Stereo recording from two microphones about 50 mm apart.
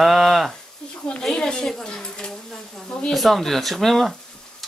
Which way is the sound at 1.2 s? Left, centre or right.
Centre.